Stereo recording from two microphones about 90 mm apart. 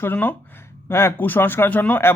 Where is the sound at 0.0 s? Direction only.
20° left (ahead or behind).